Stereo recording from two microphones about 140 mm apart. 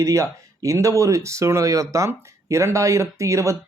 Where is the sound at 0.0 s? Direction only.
25° right (ahead or behind).